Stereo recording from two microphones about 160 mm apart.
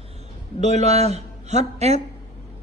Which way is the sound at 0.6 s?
45° right (ahead or behind).